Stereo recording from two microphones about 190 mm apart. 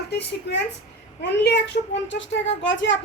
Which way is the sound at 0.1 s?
65° left (ahead or behind).